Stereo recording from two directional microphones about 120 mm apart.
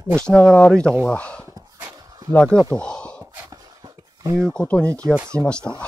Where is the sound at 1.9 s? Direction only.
30° right (ahead or behind).